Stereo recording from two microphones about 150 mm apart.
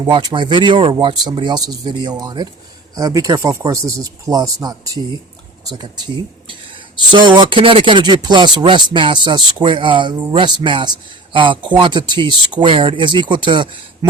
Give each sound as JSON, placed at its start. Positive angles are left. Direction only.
{"t": 0.0, "sound": "speech", "side_deg": -30}